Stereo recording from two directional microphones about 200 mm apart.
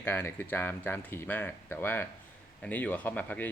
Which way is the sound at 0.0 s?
10° left (ahead or behind).